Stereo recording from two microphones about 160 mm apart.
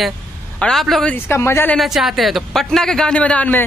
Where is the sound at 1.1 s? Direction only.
15° left (ahead or behind).